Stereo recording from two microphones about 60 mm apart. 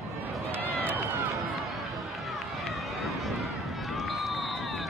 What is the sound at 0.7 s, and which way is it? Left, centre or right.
Run, right.